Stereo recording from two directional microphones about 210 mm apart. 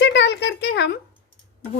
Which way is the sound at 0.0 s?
55° left (ahead or behind).